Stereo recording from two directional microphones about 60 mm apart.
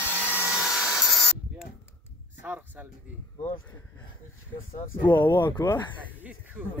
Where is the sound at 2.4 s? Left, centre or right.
Right.